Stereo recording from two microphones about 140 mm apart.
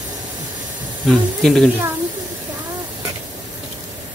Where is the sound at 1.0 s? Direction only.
5° left (ahead or behind).